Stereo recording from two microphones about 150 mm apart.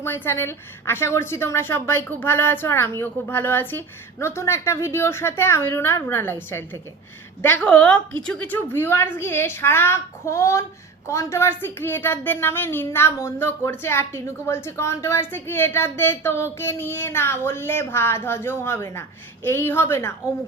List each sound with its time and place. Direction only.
0.0 s a woman's voice: 15° left (ahead or behind)